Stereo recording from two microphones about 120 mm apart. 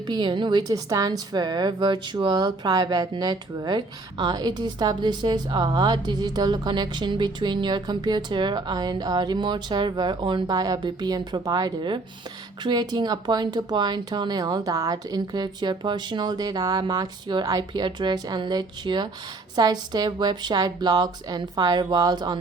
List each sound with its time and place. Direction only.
0.1 s a woman's voice: 40° right (ahead or behind)